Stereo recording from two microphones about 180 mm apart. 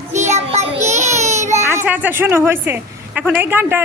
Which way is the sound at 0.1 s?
40° right (ahead or behind).